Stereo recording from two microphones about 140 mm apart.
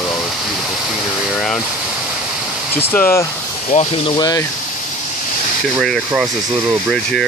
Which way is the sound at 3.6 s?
45° left (ahead or behind).